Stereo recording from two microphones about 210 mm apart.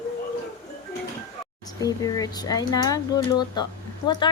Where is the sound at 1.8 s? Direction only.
15° left (ahead or behind).